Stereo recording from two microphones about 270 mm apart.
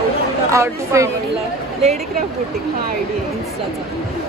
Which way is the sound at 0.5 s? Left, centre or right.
Centre.